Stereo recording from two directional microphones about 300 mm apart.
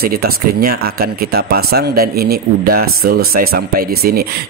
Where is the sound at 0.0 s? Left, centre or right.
Right.